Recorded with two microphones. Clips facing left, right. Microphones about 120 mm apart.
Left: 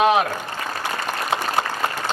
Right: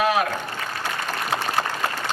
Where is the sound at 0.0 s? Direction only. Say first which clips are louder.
Left 4 dB; 25° left (ahead or behind).